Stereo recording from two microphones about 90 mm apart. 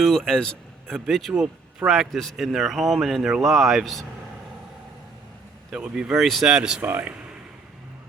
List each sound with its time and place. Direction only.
0.0 s a man's voice: 5° left (ahead or behind)
1.3 s speech: 15° right (ahead or behind)
1.9 s speech: centre (ahead or behind)
5.7 s speech: 10° right (ahead or behind)
6.8 s speech: 20° right (ahead or behind)